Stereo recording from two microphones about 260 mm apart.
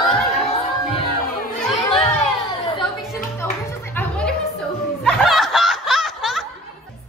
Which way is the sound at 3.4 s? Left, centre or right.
Centre.